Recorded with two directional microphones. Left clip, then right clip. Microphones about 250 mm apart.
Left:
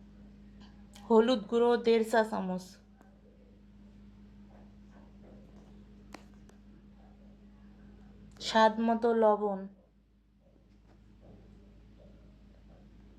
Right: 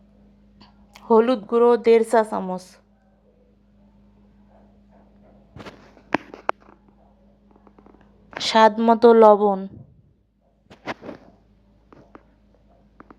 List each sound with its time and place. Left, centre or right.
0.6 s speech: right
8.4 s a woman's voice: right